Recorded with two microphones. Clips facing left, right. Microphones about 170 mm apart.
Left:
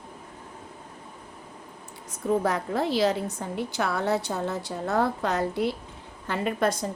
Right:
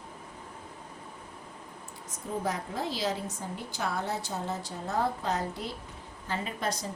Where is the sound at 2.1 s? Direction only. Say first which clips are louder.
Left 8 dB; 65° left (ahead or behind).